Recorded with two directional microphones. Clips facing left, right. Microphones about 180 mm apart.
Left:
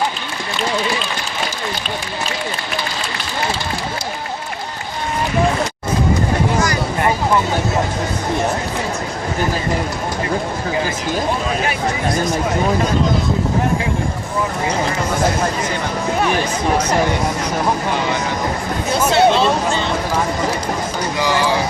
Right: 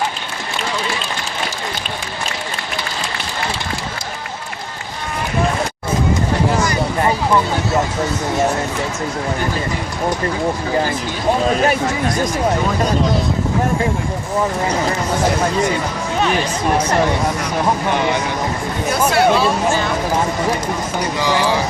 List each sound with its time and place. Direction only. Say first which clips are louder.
11.4 s speech: right 5 dB; 40° right (ahead or behind)
19.1 s speech: left 2 dB; 25° left (ahead or behind)